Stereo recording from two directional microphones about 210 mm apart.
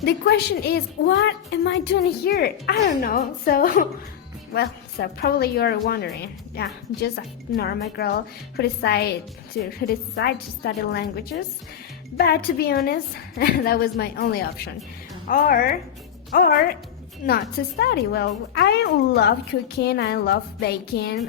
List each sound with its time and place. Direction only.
0.0 s a woman's voice: 50° left (ahead or behind)
7.5 s a woman's voice: 50° left (ahead or behind)
12.1 s a woman's voice: 45° left (ahead or behind)